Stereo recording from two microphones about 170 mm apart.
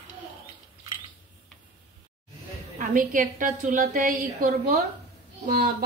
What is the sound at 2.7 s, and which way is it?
A woman's voice, 50° right (ahead or behind).